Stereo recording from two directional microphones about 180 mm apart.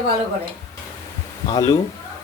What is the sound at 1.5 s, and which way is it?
Speech, 20° left (ahead or behind).